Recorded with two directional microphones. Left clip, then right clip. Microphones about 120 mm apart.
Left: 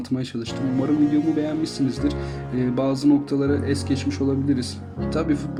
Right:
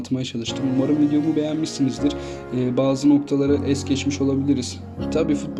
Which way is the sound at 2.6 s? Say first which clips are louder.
Right 2 dB; 30° right (ahead or behind).